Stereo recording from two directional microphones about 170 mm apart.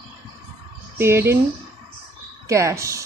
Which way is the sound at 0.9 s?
15° right (ahead or behind).